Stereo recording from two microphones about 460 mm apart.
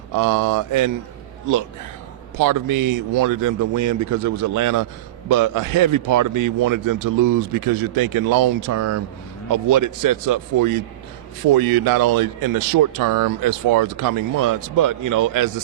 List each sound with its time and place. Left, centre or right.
0.2 s a man's voice: right
2.4 s a man's voice: right